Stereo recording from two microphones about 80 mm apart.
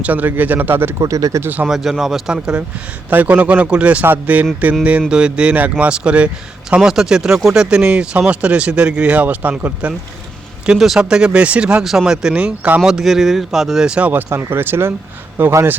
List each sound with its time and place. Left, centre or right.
0.0 s speech: right
0.9 s speech: right
1.4 s speech: right
1.6 s speech: centre
2.3 s speech: centre
10.7 s speech: centre
12.8 s speech: centre
14.1 s speech: right